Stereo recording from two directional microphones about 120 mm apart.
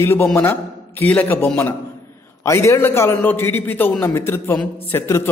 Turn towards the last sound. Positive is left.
turn(degrees=20)  # may be behind; listen again after turning